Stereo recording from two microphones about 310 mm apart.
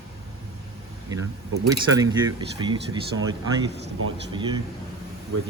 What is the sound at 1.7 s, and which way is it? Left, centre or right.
Speech, centre.